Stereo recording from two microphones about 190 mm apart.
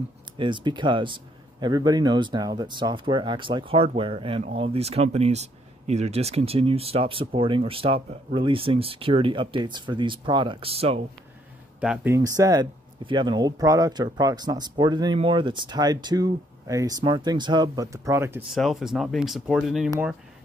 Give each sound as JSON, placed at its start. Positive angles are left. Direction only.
{"t": 0.4, "sound": "speech", "side_deg": -25}
{"t": 11.8, "sound": "speech", "side_deg": -5}
{"t": 18.5, "sound": "speech", "side_deg": 0}